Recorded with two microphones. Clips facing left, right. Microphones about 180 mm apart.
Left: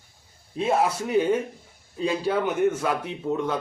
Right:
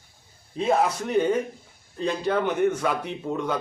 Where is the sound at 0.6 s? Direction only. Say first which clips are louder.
Even; 5° left (ahead or behind).